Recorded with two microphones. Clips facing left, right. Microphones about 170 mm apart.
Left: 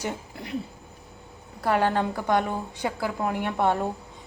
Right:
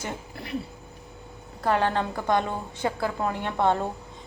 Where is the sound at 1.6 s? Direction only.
15° left (ahead or behind).